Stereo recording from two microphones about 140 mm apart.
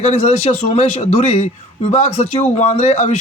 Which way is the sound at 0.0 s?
50° left (ahead or behind).